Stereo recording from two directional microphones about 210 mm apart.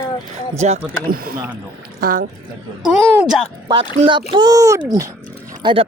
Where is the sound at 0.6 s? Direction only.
35° right (ahead or behind).